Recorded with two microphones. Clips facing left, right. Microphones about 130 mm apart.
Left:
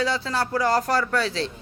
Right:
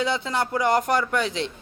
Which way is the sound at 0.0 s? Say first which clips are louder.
Even; 20° right (ahead or behind).